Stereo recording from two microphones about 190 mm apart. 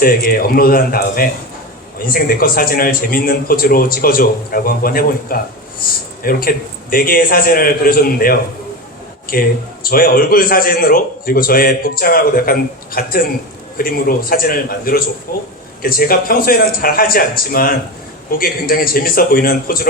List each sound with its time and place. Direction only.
0.0 s a man's voice: 50° left (ahead or behind)